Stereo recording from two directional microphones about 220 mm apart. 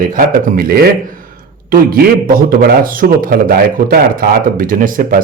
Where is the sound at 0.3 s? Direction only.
40° right (ahead or behind).